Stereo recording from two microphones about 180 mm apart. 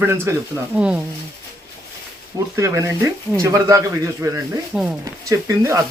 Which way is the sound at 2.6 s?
15° right (ahead or behind).